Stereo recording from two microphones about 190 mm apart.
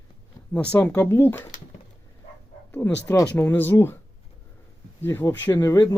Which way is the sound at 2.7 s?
10° left (ahead or behind).